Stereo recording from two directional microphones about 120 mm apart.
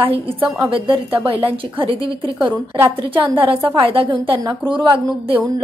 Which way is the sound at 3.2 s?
45° right (ahead or behind).